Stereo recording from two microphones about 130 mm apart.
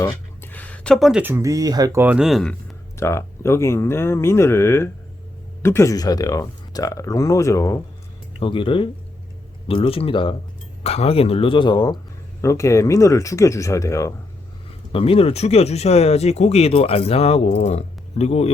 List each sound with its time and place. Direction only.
0.0 s a sound: 15° left (ahead or behind)
1.2 s speech: 20° right (ahead or behind)
2.0 s speech: 10° right (ahead or behind)
3.0 s speech: 20° left (ahead or behind)
8.4 s speech: 40° left (ahead or behind)
12.4 s speech: 20° left (ahead or behind)
14.9 s speech: 45° left (ahead or behind)